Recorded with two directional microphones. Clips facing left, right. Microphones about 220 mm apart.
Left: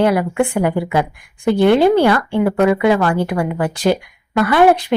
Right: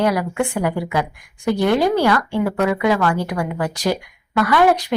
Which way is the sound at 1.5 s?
25° left (ahead or behind).